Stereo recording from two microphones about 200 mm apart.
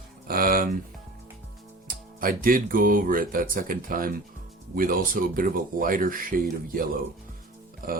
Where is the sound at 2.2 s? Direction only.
45° right (ahead or behind).